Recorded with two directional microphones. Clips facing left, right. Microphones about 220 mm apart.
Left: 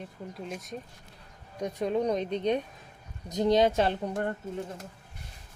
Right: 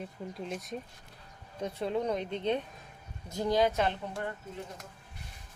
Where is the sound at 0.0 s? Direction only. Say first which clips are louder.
Even; 5° left (ahead or behind).